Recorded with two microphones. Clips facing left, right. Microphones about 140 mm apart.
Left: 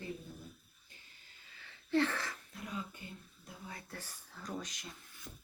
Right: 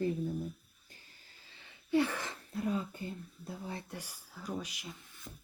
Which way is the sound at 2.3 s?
30° right (ahead or behind).